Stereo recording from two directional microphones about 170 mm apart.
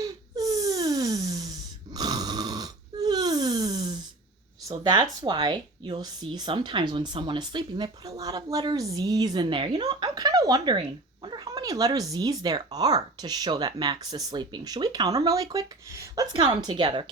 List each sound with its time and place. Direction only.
0.0 s wheeze: 20° right (ahead or behind)
4.7 s speech: 25° right (ahead or behind)